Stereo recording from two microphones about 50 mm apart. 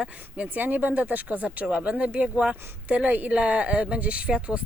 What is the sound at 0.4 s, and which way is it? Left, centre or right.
Speech, right.